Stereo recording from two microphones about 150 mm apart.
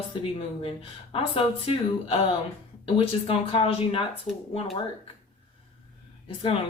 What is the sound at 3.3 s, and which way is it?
Speech, 40° left (ahead or behind).